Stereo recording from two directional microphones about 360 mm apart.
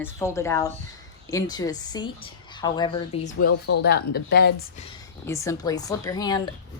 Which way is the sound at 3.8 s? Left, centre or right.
Left.